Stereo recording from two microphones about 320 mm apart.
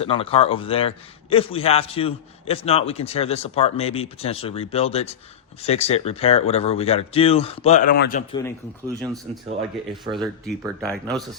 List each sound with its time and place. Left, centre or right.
0.0 s a man's voice: centre
9.0 s speech: centre